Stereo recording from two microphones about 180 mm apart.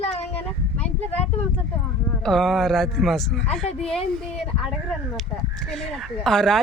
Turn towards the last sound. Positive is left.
turn(degrees=0)  # may be behind; listen again after turning